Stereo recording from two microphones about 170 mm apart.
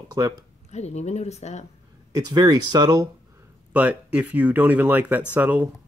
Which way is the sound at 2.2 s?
25° right (ahead or behind).